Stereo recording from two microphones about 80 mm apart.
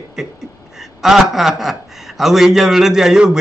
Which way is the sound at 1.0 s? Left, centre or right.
Centre.